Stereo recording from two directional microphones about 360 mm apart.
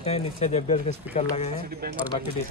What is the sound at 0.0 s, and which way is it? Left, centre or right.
Speech, centre.